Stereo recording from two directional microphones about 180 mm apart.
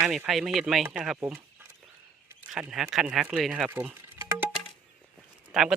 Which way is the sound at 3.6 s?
10° right (ahead or behind).